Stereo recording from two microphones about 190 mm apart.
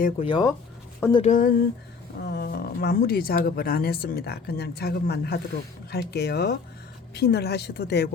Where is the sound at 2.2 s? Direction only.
55° left (ahead or behind).